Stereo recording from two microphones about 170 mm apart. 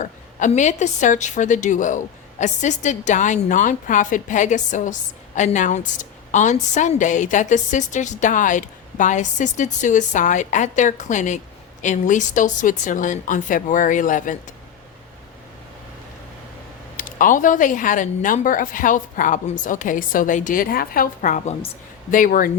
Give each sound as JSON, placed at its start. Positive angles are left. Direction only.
{"t": 0.0, "sound": "a woman's voice", "side_deg": 45}
{"t": 17.0, "sound": "a woman's voice", "side_deg": 50}